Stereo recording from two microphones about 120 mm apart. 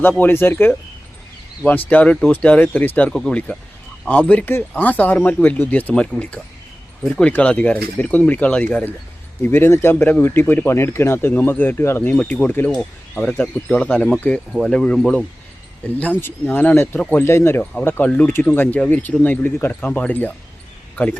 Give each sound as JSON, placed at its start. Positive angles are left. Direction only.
{"t": 0.0, "sound": "speech", "side_deg": 15}
{"t": 1.9, "sound": "speech", "side_deg": 10}